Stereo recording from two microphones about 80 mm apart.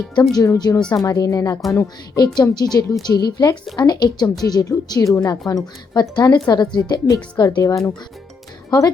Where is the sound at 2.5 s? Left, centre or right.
Left.